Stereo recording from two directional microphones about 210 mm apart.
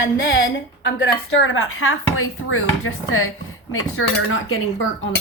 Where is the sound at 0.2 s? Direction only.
60° left (ahead or behind).